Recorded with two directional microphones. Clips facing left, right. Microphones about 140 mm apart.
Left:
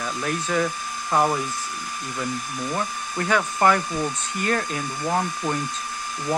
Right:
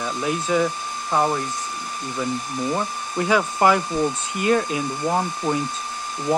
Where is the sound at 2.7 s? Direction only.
15° right (ahead or behind).